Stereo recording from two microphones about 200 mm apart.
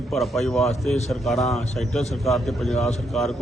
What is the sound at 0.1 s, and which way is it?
A man's voice, centre (ahead or behind).